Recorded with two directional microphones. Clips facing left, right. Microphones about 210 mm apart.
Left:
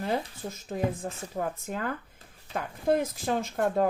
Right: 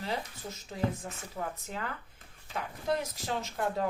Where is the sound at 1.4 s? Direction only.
50° left (ahead or behind).